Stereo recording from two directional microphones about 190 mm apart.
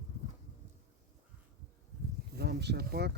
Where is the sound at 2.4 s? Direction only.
60° right (ahead or behind).